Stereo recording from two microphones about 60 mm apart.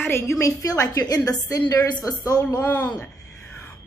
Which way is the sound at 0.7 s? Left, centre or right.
Left.